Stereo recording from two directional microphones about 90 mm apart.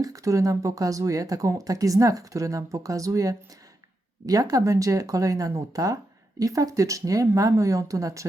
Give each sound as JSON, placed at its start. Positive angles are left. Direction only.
{"t": 0.0, "sound": "speech", "side_deg": -40}